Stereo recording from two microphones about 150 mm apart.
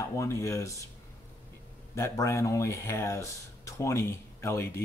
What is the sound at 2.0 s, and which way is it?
Speech, 20° left (ahead or behind).